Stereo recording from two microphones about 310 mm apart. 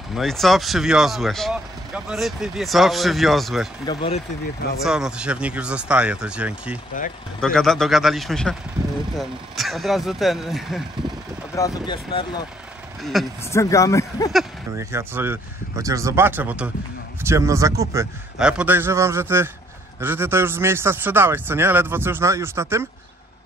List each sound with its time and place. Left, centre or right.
0.1 s speech: centre
3.8 s speech: centre
4.8 s speech: centre
11.5 s speech: centre
13.0 s speech: centre
14.3 s a man's voice: centre